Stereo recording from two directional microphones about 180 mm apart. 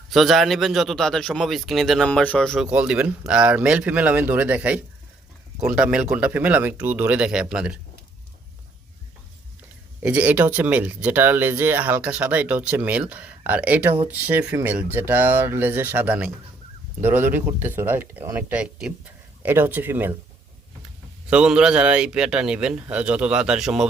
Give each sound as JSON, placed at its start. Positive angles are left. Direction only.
{"t": 0.1, "sound": "a man's voice", "side_deg": 0}
{"t": 10.0, "sound": "speech", "side_deg": -10}
{"t": 21.2, "sound": "a man's voice", "side_deg": -5}